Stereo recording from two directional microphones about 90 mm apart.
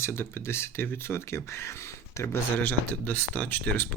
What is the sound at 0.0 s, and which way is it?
Speech, 25° left (ahead or behind).